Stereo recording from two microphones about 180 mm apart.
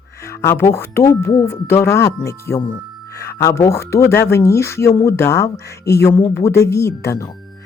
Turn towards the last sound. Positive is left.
turn(degrees=15)  # may be behind; listen again after turning